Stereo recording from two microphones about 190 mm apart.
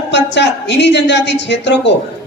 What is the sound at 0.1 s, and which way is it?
A woman's voice, 65° left (ahead or behind).